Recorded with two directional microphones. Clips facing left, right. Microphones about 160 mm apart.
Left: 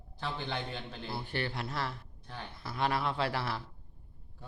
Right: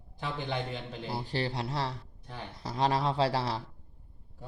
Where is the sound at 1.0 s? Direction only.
35° right (ahead or behind).